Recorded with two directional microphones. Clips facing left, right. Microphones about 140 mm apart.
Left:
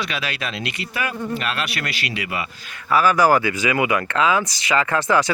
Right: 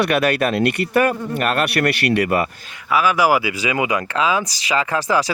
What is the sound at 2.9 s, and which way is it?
Speech, centre (ahead or behind).